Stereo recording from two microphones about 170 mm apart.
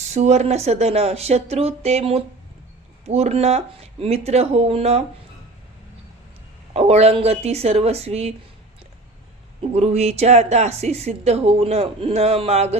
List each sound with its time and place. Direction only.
0.0 s speech: 40° right (ahead or behind)
6.7 s speech: 40° right (ahead or behind)
9.6 s speech: 40° right (ahead or behind)